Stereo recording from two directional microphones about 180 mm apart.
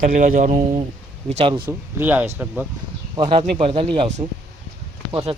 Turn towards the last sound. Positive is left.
turn(degrees=-30)  # may be behind; listen again after turning